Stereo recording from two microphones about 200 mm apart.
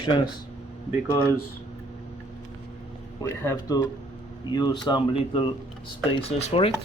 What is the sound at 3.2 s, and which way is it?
Speech, 15° left (ahead or behind).